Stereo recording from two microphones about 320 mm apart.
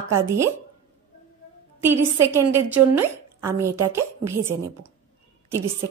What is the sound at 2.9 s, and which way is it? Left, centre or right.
A woman's voice, centre.